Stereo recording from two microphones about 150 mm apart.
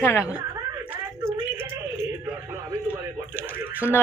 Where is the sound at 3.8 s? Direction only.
10° right (ahead or behind).